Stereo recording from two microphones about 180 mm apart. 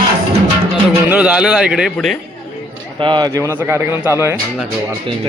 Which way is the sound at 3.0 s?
25° right (ahead or behind).